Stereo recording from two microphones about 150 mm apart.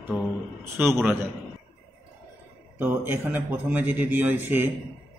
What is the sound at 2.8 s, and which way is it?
Speech, 15° right (ahead or behind).